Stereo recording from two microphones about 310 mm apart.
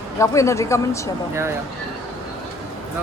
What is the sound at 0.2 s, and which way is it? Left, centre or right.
Speech, centre.